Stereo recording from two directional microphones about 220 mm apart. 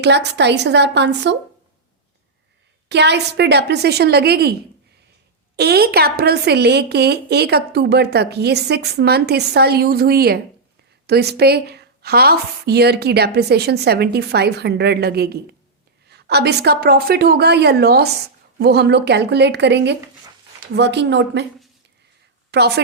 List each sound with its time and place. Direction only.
0.0 s a woman's voice: 50° right (ahead or behind)
2.9 s a woman's voice: 50° right (ahead or behind)
5.5 s a woman's voice: 45° right (ahead or behind)
22.5 s a woman's voice: 50° right (ahead or behind)